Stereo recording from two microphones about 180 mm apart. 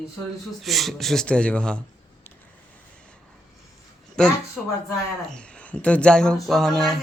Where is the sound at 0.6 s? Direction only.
Centre (ahead or behind).